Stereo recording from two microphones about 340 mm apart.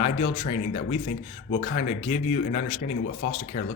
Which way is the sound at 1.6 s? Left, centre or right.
Left.